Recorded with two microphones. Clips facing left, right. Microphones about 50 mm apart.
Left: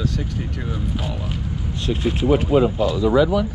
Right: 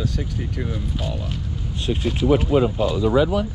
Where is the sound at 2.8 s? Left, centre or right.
Right.